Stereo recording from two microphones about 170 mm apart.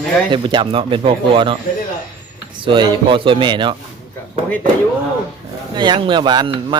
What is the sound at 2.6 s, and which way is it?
Speech, 30° right (ahead or behind).